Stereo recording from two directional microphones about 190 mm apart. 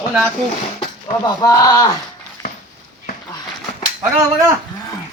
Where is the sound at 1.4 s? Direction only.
15° left (ahead or behind).